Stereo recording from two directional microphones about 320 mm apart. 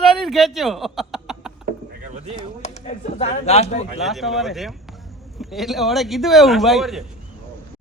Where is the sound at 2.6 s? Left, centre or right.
Left.